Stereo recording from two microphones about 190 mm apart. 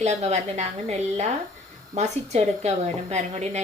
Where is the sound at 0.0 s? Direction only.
35° right (ahead or behind).